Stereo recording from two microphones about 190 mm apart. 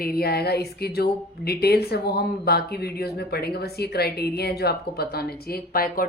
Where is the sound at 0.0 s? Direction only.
55° left (ahead or behind).